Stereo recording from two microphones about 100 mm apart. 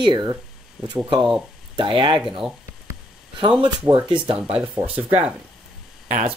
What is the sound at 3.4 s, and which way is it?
Speech, 55° right (ahead or behind).